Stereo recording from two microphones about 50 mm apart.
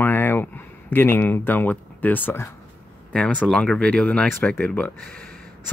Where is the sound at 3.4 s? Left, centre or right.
Centre.